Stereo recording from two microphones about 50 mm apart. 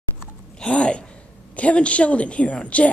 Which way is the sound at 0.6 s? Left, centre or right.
Left.